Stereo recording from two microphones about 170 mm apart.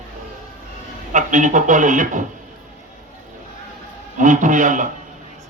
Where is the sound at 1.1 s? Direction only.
50° right (ahead or behind).